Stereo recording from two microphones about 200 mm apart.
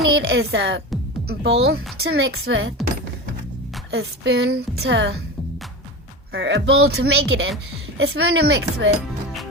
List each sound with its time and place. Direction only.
0.0 s a woman's voice: 55° right (ahead or behind)
3.9 s a woman's voice: 60° right (ahead or behind)
6.3 s a woman's voice: 60° right (ahead or behind)